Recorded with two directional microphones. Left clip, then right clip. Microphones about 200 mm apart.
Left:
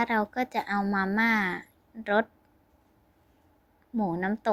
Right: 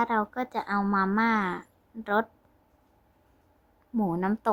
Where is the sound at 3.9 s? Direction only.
5° right (ahead or behind).